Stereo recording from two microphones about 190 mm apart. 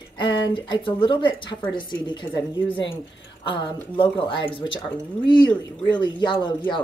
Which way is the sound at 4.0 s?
25° left (ahead or behind).